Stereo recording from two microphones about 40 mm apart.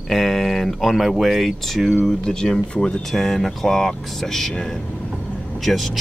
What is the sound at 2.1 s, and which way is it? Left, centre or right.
Speech, centre.